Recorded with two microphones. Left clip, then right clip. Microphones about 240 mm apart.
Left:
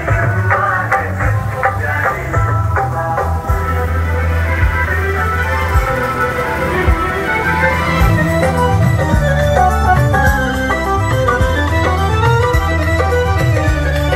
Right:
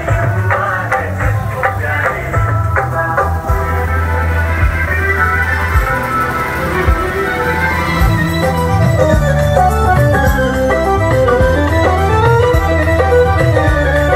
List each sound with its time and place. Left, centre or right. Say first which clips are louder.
0.5 s music: left 1 dB; centre
9.4 s music: left 1 dB; right